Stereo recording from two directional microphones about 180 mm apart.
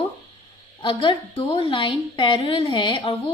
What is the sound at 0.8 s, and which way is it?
A woman's voice, 30° left (ahead or behind).